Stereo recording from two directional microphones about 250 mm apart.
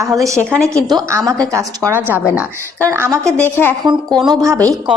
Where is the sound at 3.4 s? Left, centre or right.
Centre.